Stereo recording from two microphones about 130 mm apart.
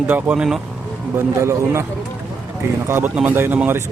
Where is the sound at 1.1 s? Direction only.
20° right (ahead or behind).